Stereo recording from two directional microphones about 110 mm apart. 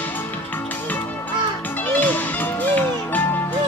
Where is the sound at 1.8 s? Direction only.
15° left (ahead or behind).